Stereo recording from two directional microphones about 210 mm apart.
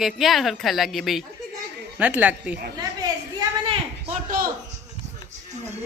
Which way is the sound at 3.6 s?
35° right (ahead or behind).